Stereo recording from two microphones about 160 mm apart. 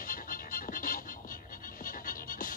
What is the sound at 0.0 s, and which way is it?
Music, 60° left (ahead or behind).